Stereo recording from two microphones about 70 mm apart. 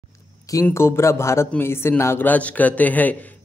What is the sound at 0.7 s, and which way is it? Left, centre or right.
Speech, left.